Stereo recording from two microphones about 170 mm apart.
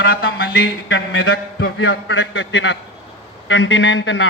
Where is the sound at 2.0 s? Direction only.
90° left.